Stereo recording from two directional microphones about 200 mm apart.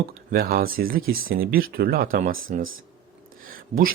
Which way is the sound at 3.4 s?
45° right (ahead or behind).